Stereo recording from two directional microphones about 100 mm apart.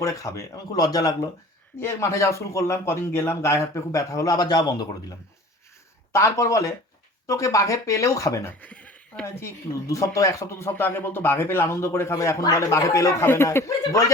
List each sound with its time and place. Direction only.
0.0 s speech: 30° left (ahead or behind)
1.8 s speech: 25° left (ahead or behind)
6.1 s speech: 30° left (ahead or behind)
8.6 s a sound: 15° left (ahead or behind)
9.2 s speech: 25° left (ahead or behind)